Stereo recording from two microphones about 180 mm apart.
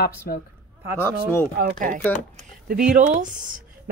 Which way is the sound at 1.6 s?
50° right (ahead or behind).